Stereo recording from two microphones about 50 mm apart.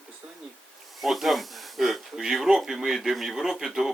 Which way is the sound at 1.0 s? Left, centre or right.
Centre.